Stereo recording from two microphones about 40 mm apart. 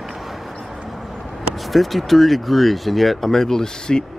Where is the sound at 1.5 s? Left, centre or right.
Centre.